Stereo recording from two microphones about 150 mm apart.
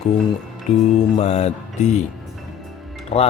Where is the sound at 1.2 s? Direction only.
45° left (ahead or behind).